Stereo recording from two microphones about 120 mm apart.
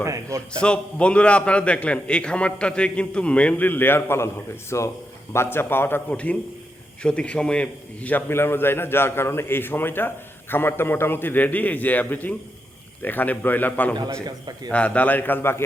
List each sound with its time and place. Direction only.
0.0 s a man's voice: 25° right (ahead or behind)
0.5 s a man's voice: 10° left (ahead or behind)
14.3 s a man's voice: 35° right (ahead or behind)
14.7 s a man's voice: 10° left (ahead or behind)